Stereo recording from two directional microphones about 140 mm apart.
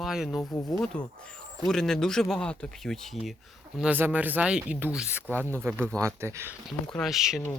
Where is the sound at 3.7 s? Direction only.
10° right (ahead or behind).